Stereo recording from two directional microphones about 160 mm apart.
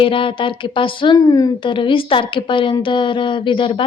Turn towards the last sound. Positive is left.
turn(degrees=30)  # may be behind; listen again after turning